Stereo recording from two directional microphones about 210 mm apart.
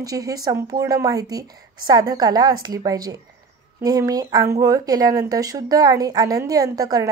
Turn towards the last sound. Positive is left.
turn(degrees=-15)  # may be behind; listen again after turning